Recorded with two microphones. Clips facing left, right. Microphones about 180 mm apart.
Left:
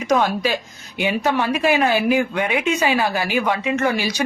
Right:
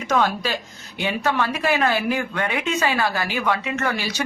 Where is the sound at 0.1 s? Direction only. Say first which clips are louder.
Left 3 dB; 15° left (ahead or behind).